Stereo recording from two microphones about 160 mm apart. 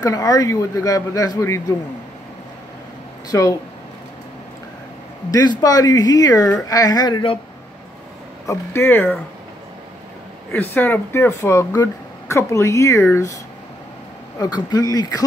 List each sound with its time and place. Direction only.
0.0 s a man's voice: 20° left (ahead or behind)
3.3 s a man's voice: 20° left (ahead or behind)
5.6 s a man's voice: 20° left (ahead or behind)
8.5 s speech: 15° left (ahead or behind)
10.5 s speech: 10° left (ahead or behind)
14.4 s a man's voice: 25° left (ahead or behind)